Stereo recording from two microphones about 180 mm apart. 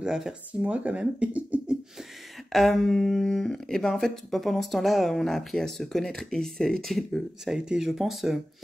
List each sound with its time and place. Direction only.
0.0 s speech: 5° right (ahead or behind)